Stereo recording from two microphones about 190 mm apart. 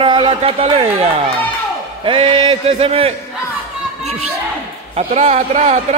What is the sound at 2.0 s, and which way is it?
Speech, 30° right (ahead or behind).